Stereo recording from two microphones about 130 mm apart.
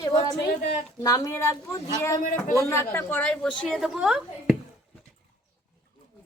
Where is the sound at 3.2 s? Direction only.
10° left (ahead or behind).